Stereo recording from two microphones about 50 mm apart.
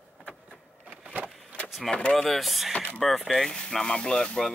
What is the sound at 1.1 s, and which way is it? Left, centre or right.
Vehicle, right.